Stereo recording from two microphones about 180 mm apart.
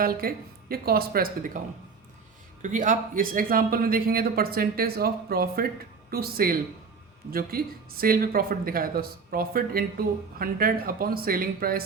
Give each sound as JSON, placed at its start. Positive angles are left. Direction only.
{"t": 0.0, "sound": "a man's voice", "side_deg": -55}